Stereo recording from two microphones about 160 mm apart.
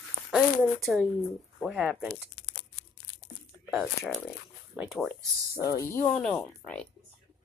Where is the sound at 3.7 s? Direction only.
Centre (ahead or behind).